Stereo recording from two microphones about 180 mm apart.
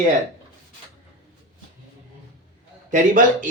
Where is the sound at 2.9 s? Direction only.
45° right (ahead or behind).